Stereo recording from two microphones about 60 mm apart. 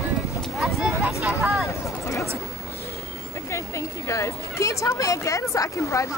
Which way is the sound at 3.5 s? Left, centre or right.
Left.